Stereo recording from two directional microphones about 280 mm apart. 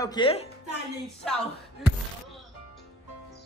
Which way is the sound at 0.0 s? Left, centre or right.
Centre.